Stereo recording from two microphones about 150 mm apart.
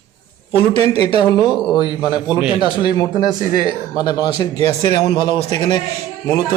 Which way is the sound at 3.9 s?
30° left (ahead or behind).